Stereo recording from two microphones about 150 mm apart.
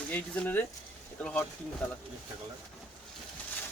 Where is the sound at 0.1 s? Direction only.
10° left (ahead or behind).